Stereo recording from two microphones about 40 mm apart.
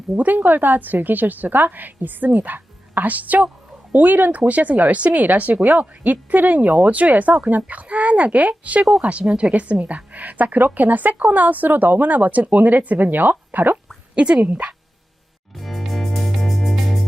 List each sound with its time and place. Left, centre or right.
0.2 s speech: right
9.5 s speech: right
14.2 s speech: right
15.5 s music: centre